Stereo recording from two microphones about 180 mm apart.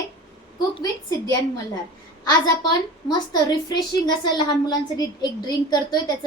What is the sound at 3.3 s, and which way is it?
A woman's voice, 25° left (ahead or behind).